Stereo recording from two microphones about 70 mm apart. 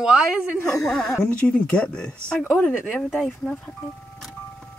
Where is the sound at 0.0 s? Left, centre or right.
Centre.